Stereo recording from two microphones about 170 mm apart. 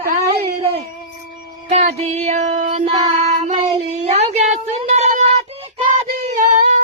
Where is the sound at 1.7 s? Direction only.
40° right (ahead or behind).